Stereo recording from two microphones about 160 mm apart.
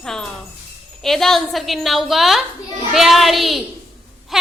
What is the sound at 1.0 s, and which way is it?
A woman's voice, centre (ahead or behind).